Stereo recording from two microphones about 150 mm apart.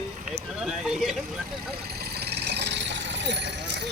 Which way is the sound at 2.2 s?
90° right.